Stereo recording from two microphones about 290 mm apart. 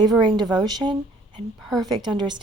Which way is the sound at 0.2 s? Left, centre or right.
Centre.